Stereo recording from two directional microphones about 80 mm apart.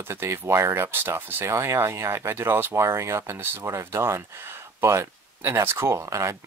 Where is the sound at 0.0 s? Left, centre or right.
Right.